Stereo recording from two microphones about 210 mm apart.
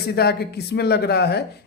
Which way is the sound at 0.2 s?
50° left (ahead or behind).